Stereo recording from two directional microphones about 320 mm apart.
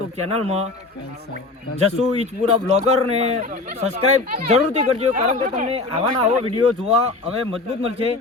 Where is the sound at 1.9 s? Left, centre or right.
Centre.